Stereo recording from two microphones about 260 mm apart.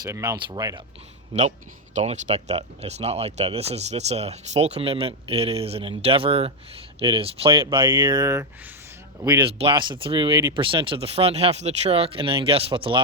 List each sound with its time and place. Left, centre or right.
0.0 s speech: centre
2.0 s speech: right